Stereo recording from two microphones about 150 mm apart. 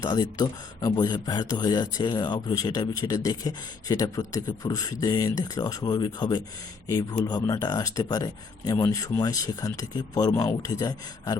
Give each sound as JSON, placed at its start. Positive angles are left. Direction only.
{"t": 0.0, "sound": "speech", "side_deg": 25}